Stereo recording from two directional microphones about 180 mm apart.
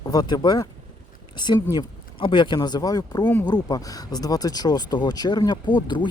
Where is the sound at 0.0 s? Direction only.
20° left (ahead or behind).